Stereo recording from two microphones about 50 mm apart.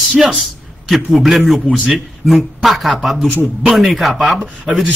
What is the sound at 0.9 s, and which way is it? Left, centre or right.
A man's voice, centre.